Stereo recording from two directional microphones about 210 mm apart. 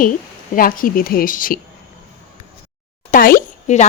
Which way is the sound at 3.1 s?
40° left (ahead or behind).